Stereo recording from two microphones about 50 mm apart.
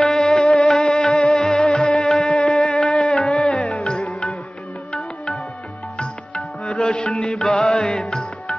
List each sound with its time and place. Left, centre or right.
0.2 s music: centre
1.8 s music: centre
3.2 s music: centre